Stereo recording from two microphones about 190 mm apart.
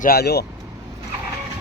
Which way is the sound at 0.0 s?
55° left (ahead or behind).